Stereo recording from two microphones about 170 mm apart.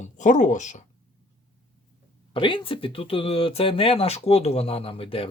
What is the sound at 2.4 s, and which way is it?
Speech, 30° left (ahead or behind).